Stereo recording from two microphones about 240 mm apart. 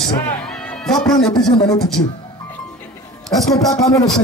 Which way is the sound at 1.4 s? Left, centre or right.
Centre.